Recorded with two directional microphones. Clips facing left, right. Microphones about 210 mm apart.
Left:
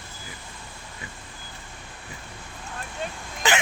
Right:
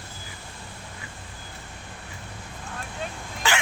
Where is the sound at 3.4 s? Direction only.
20° left (ahead or behind).